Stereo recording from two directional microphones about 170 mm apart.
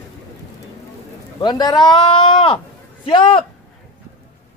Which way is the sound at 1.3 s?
25° left (ahead or behind).